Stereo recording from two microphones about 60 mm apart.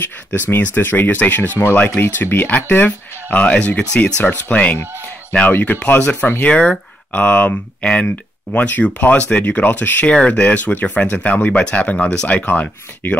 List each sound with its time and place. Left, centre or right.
0.0 s speech: left